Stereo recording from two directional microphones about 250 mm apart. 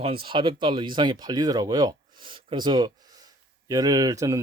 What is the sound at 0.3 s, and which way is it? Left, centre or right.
Speech, centre.